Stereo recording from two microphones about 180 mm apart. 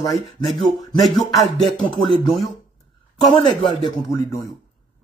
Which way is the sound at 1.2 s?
Centre (ahead or behind).